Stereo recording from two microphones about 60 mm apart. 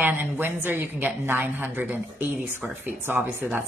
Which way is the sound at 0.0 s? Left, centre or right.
Right.